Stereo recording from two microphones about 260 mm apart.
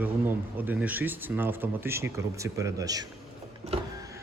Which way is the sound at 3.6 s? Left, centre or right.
Right.